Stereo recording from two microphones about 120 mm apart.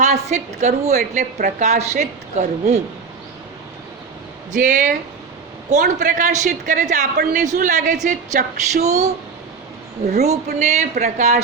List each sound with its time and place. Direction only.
0.0 s a woman's voice: 75° right (ahead or behind)
4.5 s a man's voice: 90° right; by 11.3 s 75° right (ahead or behind)